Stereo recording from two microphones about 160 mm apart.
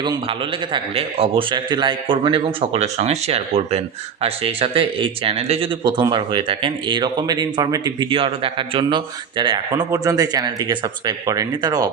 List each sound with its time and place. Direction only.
0.0 s a man's voice: 30° right (ahead or behind)